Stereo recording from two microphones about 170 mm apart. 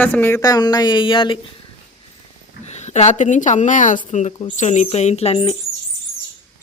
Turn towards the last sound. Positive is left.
turn(degrees=35)  # may be behind; listen again after turning